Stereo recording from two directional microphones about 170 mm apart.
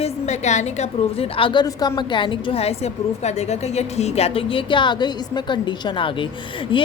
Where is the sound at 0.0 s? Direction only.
40° left (ahead or behind).